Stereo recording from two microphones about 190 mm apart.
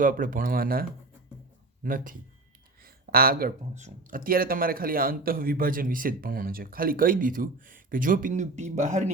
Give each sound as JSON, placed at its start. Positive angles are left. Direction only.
{"t": 0.0, "sound": "speech", "side_deg": -45}
{"t": 2.8, "sound": "a sound", "side_deg": -50}
{"t": 3.8, "sound": "speech", "side_deg": -40}